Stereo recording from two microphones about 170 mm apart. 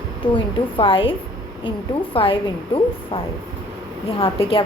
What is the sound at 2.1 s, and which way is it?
A woman's voice, 30° left (ahead or behind).